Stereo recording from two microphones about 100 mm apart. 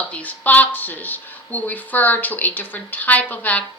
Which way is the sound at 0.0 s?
15° left (ahead or behind).